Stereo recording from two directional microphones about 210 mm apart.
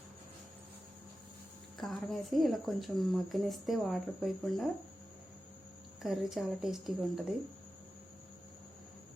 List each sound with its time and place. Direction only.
1.8 s speech: centre (ahead or behind)
6.0 s speech: centre (ahead or behind)